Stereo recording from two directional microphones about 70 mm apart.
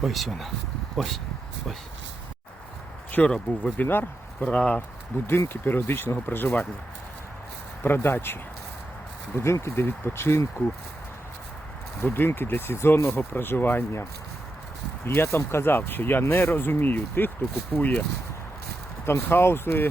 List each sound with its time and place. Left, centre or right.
0.0 s speech: centre
3.1 s speech: centre
3.8 s speech: left
4.4 s speech: centre
5.1 s speech: left
7.8 s speech: left
9.4 s speech: left
12.1 s speech: left
15.0 s speech: left
19.0 s speech: left